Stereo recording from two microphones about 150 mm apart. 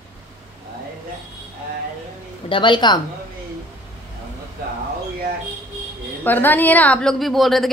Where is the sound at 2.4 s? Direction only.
35° left (ahead or behind).